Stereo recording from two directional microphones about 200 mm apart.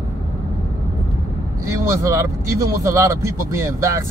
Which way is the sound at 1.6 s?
15° right (ahead or behind).